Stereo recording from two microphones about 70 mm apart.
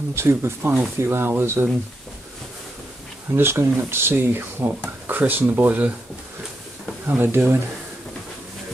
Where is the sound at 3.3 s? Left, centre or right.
Right.